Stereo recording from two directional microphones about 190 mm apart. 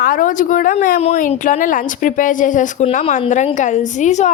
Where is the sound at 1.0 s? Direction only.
40° left (ahead or behind).